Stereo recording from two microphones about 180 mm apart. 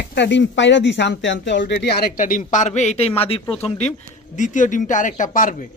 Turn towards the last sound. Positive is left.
turn(degrees=45)  # may be behind; listen again after turning